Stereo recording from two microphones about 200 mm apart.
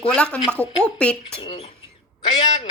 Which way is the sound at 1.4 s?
25° left (ahead or behind).